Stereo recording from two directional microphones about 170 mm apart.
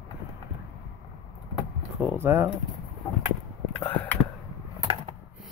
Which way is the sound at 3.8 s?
10° left (ahead or behind).